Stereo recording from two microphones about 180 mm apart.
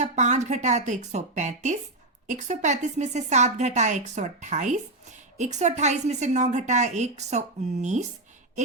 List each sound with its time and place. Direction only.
0.0 s a woman's voice: 40° right (ahead or behind)